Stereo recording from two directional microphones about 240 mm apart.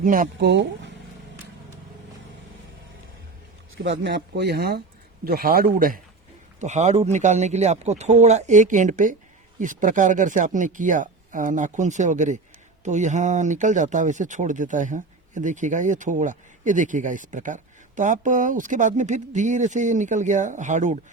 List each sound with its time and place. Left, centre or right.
0.0 s speech: right
3.8 s speech: right